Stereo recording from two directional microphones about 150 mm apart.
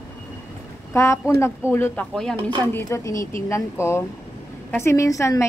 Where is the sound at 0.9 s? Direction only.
20° left (ahead or behind); by 2.4 s 5° left (ahead or behind).